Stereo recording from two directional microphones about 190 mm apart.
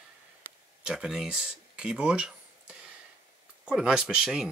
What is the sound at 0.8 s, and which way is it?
Speech, 5° right (ahead or behind).